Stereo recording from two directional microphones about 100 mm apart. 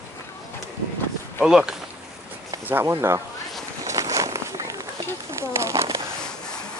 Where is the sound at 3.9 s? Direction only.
30° right (ahead or behind).